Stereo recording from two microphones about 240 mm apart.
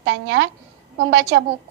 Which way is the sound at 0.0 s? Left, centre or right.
Right.